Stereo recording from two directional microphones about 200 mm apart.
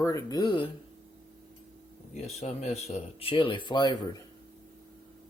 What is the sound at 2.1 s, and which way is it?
Speech, 35° left (ahead or behind).